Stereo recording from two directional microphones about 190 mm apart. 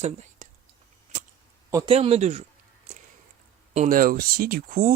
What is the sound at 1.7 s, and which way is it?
Speech, 30° right (ahead or behind).